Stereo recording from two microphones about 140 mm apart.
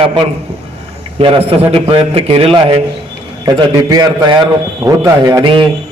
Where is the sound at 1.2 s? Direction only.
35° right (ahead or behind).